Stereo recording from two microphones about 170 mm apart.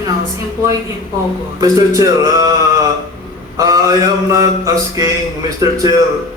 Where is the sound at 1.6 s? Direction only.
20° right (ahead or behind).